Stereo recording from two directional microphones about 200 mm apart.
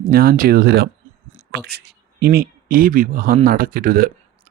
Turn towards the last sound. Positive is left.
turn(degrees=-50)  # may be behind; listen again after turning